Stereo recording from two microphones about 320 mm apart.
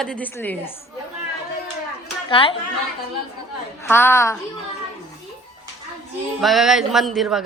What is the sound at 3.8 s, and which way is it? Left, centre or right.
Speech, centre.